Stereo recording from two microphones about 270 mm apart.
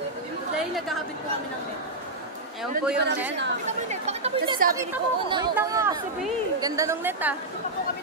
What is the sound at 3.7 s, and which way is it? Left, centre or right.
A woman's voice, right.